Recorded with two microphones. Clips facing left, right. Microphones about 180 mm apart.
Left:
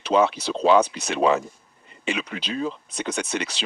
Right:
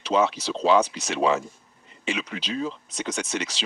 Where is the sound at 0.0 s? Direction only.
60° left (ahead or behind).